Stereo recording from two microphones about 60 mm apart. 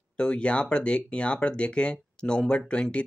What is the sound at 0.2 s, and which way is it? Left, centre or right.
Speech, centre.